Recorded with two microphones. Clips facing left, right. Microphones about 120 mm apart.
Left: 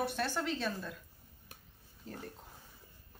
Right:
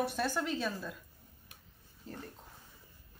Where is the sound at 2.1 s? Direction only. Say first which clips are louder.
Even; centre (ahead or behind).